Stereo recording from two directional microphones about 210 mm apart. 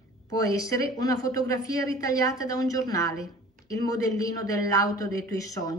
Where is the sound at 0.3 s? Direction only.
15° left (ahead or behind).